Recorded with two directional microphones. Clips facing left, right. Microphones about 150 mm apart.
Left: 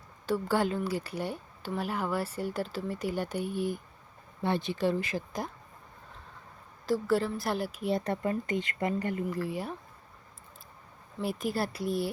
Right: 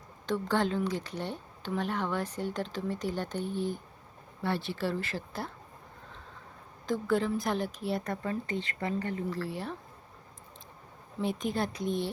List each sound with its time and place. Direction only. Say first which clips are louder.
0.3 s speech: left 1 dB; 10° left (ahead or behind)
6.8 s speech: left 1 dB; 5° left (ahead or behind)
7.9 s speech: left 4 dB; 30° left (ahead or behind)
8.2 s speech: left 3 dB; 15° left (ahead or behind)
11.2 s speech: even; 5° left (ahead or behind)